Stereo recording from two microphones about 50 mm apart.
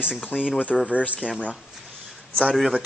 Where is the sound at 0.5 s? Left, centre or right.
Left.